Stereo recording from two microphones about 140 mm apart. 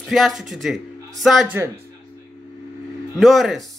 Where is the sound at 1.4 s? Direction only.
15° right (ahead or behind).